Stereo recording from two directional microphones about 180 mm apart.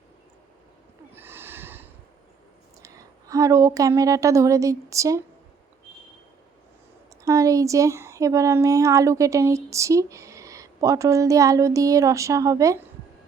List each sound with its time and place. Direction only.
1.1 s snort: 10° right (ahead or behind)
2.8 s a woman's voice: 20° right (ahead or behind)
7.3 s speech: 20° right (ahead or behind)